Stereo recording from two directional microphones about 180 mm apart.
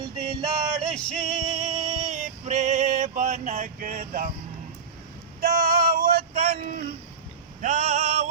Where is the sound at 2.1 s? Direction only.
40° right (ahead or behind).